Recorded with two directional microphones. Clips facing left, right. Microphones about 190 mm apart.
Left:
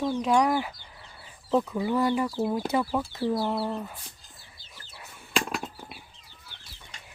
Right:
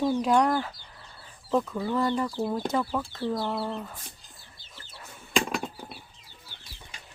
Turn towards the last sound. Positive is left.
turn(degrees=0)  # may be behind; listen again after turning